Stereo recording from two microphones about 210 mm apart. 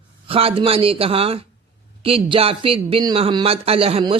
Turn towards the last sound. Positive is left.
turn(degrees=-25)  # may be behind; listen again after turning